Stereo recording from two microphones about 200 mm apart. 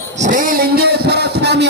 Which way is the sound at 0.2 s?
40° right (ahead or behind).